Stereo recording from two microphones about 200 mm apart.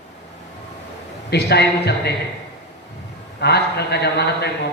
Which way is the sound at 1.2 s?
55° left (ahead or behind).